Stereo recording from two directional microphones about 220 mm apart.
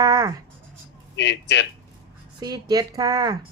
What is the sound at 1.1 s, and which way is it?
Speech, 55° left (ahead or behind).